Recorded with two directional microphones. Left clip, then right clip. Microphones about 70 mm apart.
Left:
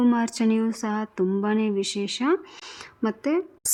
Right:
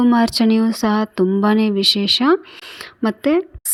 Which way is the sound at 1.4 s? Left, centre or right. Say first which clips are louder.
Right 10 dB; right.